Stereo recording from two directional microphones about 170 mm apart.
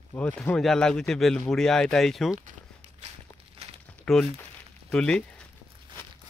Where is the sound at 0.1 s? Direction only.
10° left (ahead or behind).